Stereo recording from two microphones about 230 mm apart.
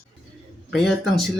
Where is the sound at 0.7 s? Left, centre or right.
Centre.